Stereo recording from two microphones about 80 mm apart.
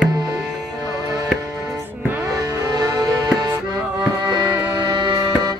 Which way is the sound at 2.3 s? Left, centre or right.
Right.